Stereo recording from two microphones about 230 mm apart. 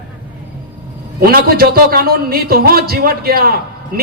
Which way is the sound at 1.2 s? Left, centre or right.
Right.